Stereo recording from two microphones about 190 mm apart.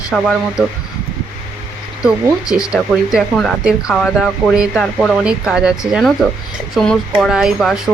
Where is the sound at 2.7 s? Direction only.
Centre (ahead or behind).